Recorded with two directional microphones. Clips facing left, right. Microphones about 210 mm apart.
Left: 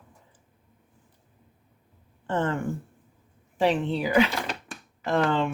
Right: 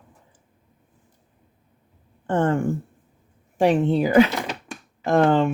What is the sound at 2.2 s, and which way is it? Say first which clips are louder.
Speech: right 6 dB; 50° right (ahead or behind).